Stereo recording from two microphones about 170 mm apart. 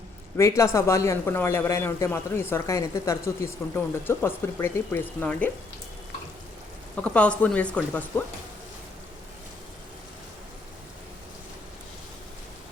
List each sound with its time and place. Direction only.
0.3 s speech: 15° left (ahead or behind)
6.9 s speech: 5° left (ahead or behind)